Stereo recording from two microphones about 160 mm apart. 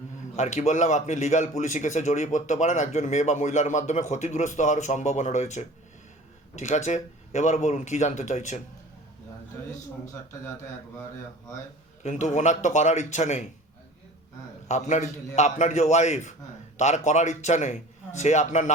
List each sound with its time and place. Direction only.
0.3 s speech: 45° left (ahead or behind)
12.0 s speech: 50° left (ahead or behind)
14.7 s speech: 50° left (ahead or behind)